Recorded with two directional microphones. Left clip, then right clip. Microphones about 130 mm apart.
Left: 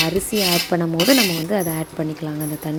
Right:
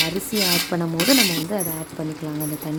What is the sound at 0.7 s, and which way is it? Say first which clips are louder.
Speech: left 4 dB; 20° left (ahead or behind).